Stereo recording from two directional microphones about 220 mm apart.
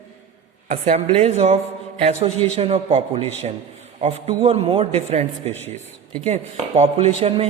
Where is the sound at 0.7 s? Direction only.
30° right (ahead or behind).